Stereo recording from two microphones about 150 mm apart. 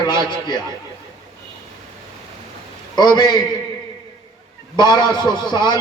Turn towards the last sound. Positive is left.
turn(degrees=30)  # may be behind; listen again after turning